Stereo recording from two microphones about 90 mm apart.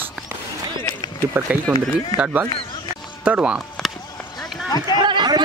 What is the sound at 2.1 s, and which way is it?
Speech, 15° right (ahead or behind).